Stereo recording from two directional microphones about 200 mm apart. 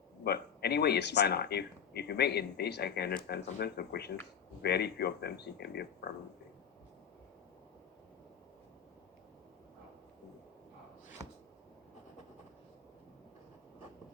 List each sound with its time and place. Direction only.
0.3 s speech: 55° left (ahead or behind)